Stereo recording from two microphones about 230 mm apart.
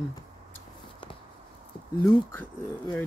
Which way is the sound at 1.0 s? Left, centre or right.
Left.